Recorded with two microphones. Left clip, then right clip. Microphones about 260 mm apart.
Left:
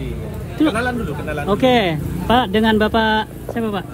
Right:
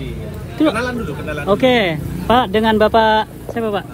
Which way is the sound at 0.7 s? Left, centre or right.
Right.